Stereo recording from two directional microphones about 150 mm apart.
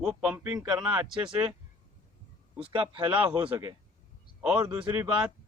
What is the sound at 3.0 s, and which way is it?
Speech, 10° right (ahead or behind).